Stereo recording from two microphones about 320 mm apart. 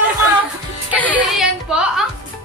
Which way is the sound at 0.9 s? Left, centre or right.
Centre.